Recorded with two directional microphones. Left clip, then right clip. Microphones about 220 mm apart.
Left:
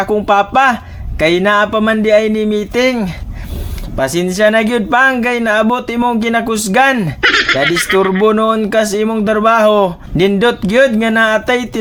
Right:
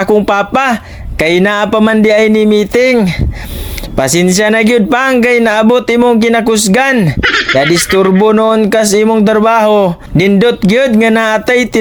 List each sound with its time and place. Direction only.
0.0 s speech: 40° right (ahead or behind)
7.2 s speech: centre (ahead or behind)
8.2 s speech: 30° right (ahead or behind)